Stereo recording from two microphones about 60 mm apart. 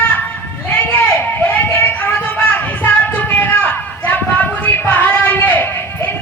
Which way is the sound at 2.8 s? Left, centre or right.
Left.